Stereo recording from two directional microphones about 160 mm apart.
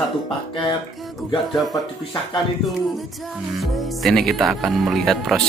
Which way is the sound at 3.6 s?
Centre (ahead or behind).